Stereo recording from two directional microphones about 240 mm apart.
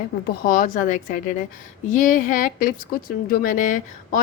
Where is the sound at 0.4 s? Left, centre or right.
Left.